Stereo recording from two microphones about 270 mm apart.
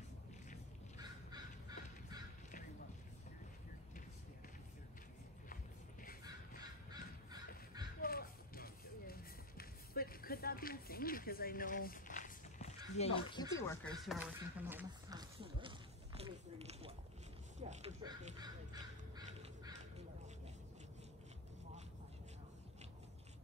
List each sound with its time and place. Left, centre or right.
0.9 s crow: centre
5.5 s a sound: left
6.6 s crow: centre
8.0 s music: left
13.6 s speech: centre
14.0 s speech: centre